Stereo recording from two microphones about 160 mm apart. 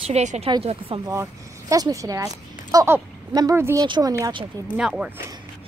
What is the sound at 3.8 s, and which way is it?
Speech, 30° right (ahead or behind).